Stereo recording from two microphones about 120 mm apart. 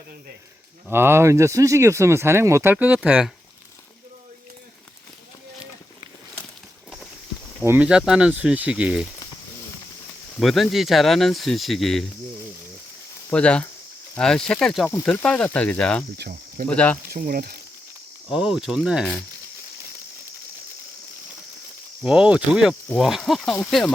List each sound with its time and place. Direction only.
0.9 s speech: 20° right (ahead or behind)
7.6 s speech: 20° right (ahead or behind)
7.9 s speech: 5° right (ahead or behind)
10.4 s speech: centre (ahead or behind)
13.3 s speech: 10° left (ahead or behind)
18.3 s speech: 5° right (ahead or behind)
22.0 s speech: 10° right (ahead or behind)